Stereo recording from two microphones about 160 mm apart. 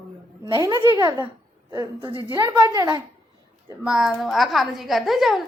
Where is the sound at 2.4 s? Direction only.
25° right (ahead or behind).